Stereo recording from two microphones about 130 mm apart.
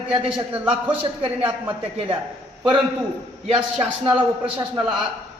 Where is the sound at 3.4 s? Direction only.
40° right (ahead or behind).